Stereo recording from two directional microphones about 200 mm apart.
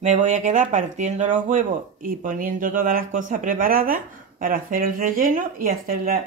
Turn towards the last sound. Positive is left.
turn(degrees=-50)  # may be behind; listen again after turning